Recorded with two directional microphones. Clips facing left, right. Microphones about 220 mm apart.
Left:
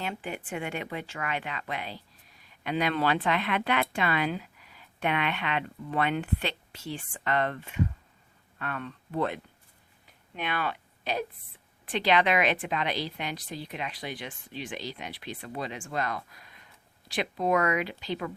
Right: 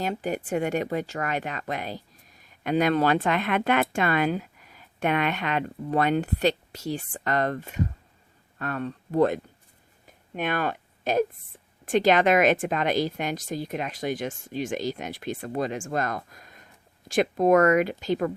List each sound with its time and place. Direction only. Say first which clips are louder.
0.0 s speech: right 7 dB; 40° right (ahead or behind)
10.1 s a sound: right 6 dB; 45° right (ahead or behind)
11.9 s speech: right 6 dB; 45° right (ahead or behind)